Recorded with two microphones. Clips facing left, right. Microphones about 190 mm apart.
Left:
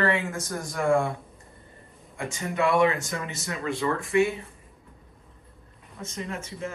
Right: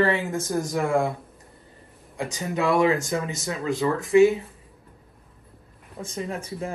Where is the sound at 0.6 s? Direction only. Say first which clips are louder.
Even; centre (ahead or behind).